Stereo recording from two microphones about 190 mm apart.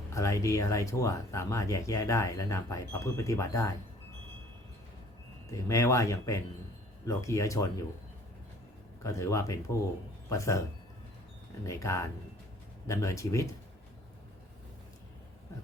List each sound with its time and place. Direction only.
0.1 s speech: 15° left (ahead or behind)
5.5 s speech: 15° left (ahead or behind)
9.0 s speech: 15° left (ahead or behind)
11.6 s speech: 15° left (ahead or behind)